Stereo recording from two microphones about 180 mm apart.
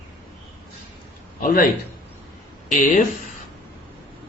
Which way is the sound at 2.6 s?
45° left (ahead or behind).